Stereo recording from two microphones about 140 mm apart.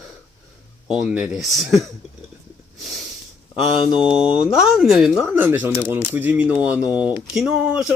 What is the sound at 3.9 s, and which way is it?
Speech, 10° right (ahead or behind).